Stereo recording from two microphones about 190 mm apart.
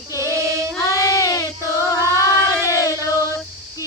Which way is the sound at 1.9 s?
15° left (ahead or behind).